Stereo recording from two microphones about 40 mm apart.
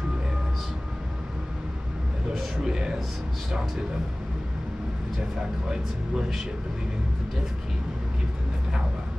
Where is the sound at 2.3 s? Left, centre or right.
Centre.